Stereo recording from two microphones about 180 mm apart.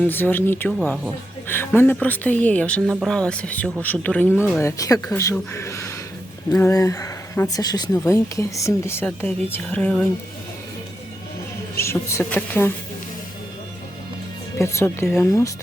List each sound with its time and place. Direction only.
0.1 s speech: 10° left (ahead or behind)
4.6 s speech: 20° left (ahead or behind)
11.8 s speech: 15° left (ahead or behind)
14.6 s speech: 15° left (ahead or behind)